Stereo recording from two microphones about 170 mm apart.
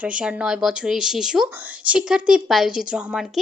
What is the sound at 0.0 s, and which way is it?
A woman's voice, 5° right (ahead or behind).